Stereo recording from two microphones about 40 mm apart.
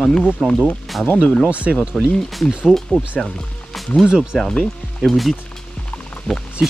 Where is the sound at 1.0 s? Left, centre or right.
Left.